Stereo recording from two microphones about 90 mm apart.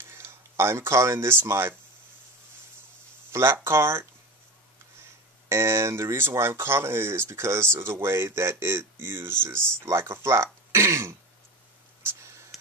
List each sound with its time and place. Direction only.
0.1 s speech: 25° right (ahead or behind)
3.3 s speech: 30° right (ahead or behind)
5.5 s speech: 30° right (ahead or behind)
12.0 s a sound: 30° right (ahead or behind)